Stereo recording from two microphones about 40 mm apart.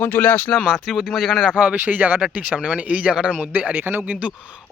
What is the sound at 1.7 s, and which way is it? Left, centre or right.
Speech, right.